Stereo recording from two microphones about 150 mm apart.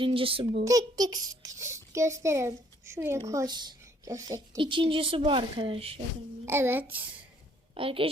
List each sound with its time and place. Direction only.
0.0 s a woman's voice: 35° right (ahead or behind)
0.6 s a child's voice: 25° right (ahead or behind); by 6.0 s 40° right (ahead or behind)
6.4 s speech: 15° right (ahead or behind)
7.8 s a woman's voice: 35° right (ahead or behind)